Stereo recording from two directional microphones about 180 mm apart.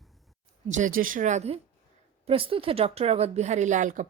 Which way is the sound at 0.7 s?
45° right (ahead or behind).